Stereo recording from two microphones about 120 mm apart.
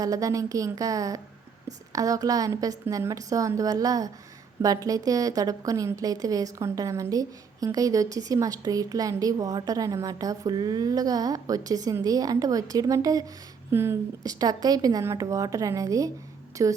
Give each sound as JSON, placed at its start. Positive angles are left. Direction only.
{"t": 0.0, "sound": "a woman's voice", "side_deg": -30}
{"t": 14.3, "sound": "a woman's voice", "side_deg": -30}